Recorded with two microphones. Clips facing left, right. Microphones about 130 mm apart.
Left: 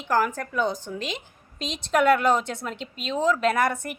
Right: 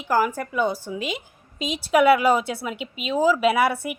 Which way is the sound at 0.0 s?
10° right (ahead or behind).